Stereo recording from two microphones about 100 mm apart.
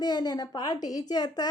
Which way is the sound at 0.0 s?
45° left (ahead or behind).